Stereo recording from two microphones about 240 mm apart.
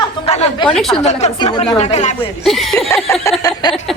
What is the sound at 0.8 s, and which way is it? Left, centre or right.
Speech, centre.